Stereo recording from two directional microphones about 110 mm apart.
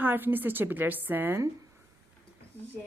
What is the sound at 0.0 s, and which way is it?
Speech, 20° right (ahead or behind).